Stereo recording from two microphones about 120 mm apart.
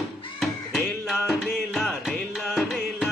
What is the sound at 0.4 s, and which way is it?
Music, centre (ahead or behind).